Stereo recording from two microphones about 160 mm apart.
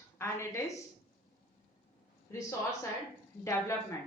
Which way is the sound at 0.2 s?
15° left (ahead or behind).